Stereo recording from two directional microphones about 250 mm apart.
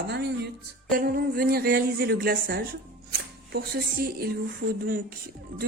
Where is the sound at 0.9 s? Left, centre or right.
Right.